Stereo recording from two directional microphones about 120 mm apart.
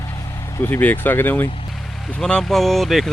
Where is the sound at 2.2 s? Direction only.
5° left (ahead or behind).